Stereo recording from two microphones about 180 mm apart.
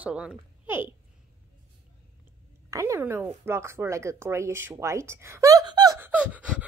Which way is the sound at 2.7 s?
15° right (ahead or behind).